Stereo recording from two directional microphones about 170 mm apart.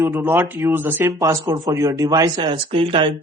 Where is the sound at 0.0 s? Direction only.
15° right (ahead or behind).